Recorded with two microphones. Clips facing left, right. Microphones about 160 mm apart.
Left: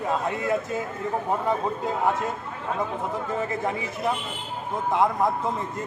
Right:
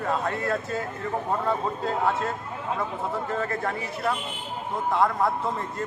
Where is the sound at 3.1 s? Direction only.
15° left (ahead or behind).